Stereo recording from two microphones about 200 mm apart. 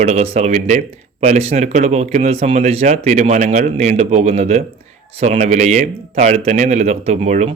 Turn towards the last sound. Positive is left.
turn(degrees=-35)  # may be behind; listen again after turning